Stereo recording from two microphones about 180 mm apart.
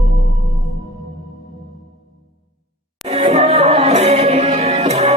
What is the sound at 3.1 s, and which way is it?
Music, 35° right (ahead or behind).